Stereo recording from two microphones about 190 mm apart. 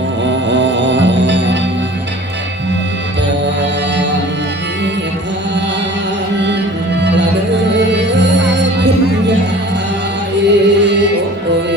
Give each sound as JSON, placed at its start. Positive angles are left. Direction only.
{"t": 0.4, "sound": "music", "side_deg": -70}
{"t": 3.4, "sound": "music", "side_deg": -70}
{"t": 7.7, "sound": "music", "side_deg": -65}
{"t": 10.3, "sound": "music", "side_deg": -65}